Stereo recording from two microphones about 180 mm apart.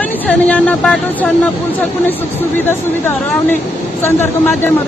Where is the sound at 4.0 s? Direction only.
10° left (ahead or behind).